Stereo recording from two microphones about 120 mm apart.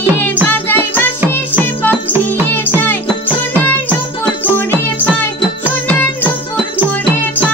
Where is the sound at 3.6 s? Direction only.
15° left (ahead or behind).